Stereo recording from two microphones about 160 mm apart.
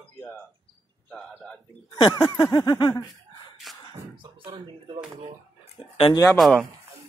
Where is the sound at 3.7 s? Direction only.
Centre (ahead or behind).